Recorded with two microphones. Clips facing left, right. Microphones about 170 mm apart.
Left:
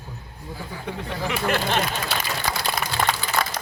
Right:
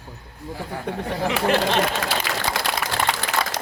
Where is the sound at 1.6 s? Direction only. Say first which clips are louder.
Right 3 dB; 85° right.